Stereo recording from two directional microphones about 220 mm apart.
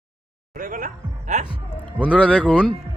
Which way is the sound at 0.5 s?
35° right (ahead or behind).